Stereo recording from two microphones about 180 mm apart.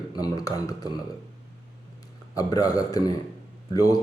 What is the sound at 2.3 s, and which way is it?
A man's voice, 20° left (ahead or behind).